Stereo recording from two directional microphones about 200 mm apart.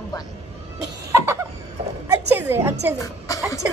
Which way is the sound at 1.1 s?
15° right (ahead or behind).